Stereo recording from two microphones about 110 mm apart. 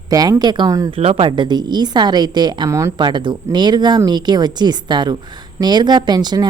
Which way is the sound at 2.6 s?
25° right (ahead or behind).